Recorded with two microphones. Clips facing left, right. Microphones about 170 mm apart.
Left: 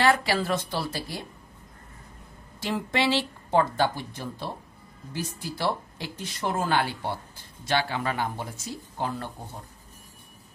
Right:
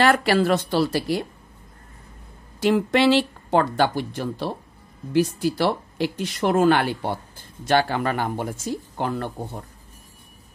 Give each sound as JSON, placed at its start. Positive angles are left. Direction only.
{"t": 0.0, "sound": "speech", "side_deg": -65}
{"t": 2.6, "sound": "speech", "side_deg": -65}